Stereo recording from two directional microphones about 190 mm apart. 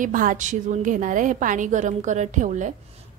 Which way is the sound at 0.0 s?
45° right (ahead or behind).